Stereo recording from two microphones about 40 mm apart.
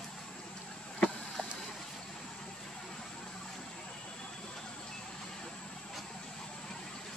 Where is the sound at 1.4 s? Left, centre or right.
Left.